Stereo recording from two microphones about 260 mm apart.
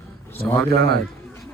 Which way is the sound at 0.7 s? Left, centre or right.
Right.